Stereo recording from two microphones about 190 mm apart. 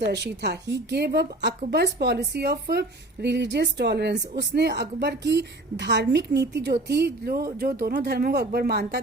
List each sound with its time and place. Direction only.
0.0 s a woman's voice: 65° right (ahead or behind)